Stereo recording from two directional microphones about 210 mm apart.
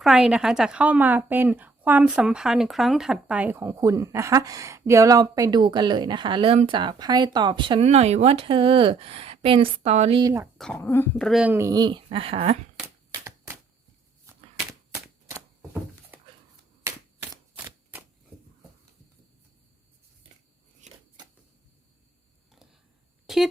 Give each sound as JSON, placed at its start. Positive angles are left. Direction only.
{"t": 0.0, "sound": "speech", "side_deg": -5}
{"t": 10.6, "sound": "speech", "side_deg": 5}
{"t": 13.1, "sound": "typewriter", "side_deg": -15}
{"t": 14.3, "sound": "a sound", "side_deg": -10}
{"t": 20.8, "sound": "shuffling cards", "side_deg": -35}
{"t": 23.2, "sound": "a sound", "side_deg": 0}